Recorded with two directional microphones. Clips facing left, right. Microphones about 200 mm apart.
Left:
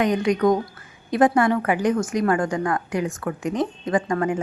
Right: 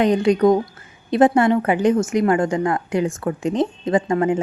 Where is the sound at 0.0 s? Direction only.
30° right (ahead or behind).